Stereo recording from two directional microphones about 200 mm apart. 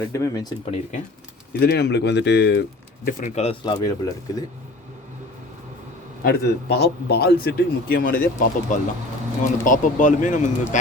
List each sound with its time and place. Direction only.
0.1 s speech: 15° left (ahead or behind)
0.6 s speech: 30° left (ahead or behind)
1.5 s speech: 55° left (ahead or behind)
3.1 s speech: 40° left (ahead or behind); by 4.4 s 20° left (ahead or behind)
6.2 s a man's voice: 55° left (ahead or behind)